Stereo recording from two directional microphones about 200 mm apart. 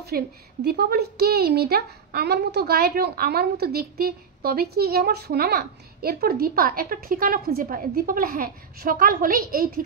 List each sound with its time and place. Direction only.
0.1 s speech: 55° right (ahead or behind)